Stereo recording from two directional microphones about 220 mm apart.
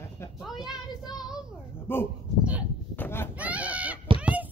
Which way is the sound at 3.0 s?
10° left (ahead or behind).